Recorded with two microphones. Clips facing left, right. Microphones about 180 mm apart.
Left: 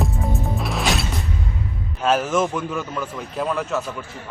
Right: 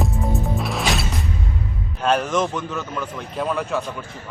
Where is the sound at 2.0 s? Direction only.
5° left (ahead or behind).